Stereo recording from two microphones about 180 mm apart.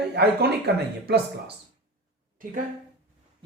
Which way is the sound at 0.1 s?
65° right (ahead or behind).